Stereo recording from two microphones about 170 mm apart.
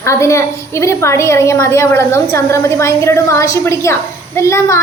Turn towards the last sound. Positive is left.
turn(degrees=15)  # may be behind; listen again after turning